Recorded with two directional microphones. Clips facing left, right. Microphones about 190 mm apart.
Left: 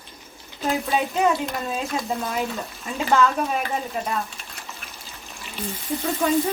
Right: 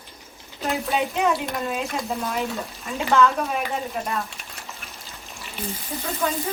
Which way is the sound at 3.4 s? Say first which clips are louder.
Left 1 dB; centre (ahead or behind).